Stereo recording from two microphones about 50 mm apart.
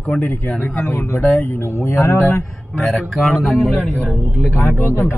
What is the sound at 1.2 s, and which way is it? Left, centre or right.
Speech, left.